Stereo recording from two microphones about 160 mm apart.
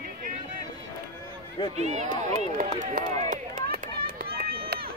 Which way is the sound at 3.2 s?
55° right (ahead or behind).